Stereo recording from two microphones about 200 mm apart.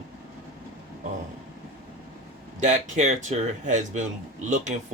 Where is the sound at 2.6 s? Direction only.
35° right (ahead or behind).